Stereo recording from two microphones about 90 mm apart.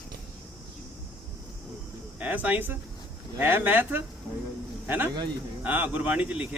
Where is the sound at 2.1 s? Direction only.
20° right (ahead or behind).